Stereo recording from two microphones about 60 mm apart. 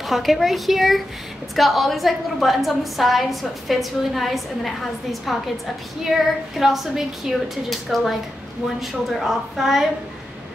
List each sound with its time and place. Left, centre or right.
0.0 s a woman's voice: centre